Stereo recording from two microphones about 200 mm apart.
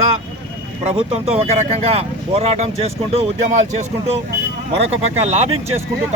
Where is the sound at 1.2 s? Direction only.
30° right (ahead or behind).